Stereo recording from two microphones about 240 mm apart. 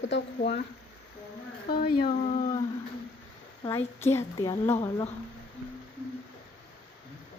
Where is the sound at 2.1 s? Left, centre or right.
Left.